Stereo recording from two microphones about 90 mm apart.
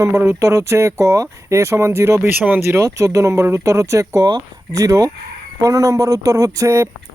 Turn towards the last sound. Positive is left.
turn(degrees=-35)  # may be behind; listen again after turning